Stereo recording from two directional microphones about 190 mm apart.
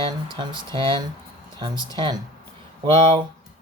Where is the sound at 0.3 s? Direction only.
25° right (ahead or behind).